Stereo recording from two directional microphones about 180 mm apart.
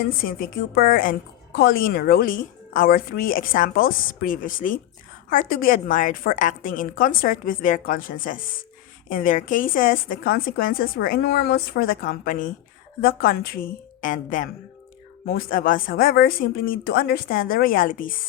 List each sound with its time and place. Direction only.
0.2 s a woman's voice: 55° left (ahead or behind)